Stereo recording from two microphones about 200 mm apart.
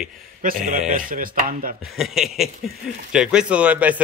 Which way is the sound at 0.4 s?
40° right (ahead or behind).